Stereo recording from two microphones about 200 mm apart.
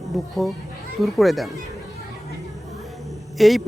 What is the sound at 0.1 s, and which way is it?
A man's voice, centre (ahead or behind).